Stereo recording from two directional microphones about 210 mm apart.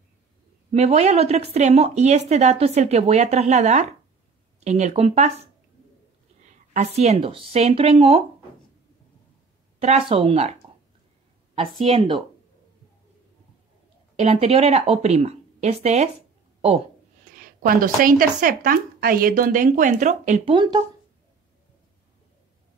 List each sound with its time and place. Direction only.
0.7 s speech: 30° right (ahead or behind)
6.7 s speech: 30° right (ahead or behind)
9.8 s speech: 30° right (ahead or behind)
11.5 s speech: 30° right (ahead or behind)
14.1 s speech: 30° right (ahead or behind)
17.4 s speech: 45° right (ahead or behind)